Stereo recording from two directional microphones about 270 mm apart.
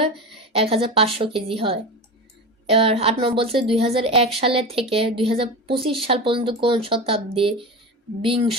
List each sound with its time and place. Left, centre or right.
0.5 s a woman's voice: right